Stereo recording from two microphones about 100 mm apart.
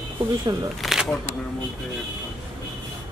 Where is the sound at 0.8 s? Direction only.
Centre (ahead or behind).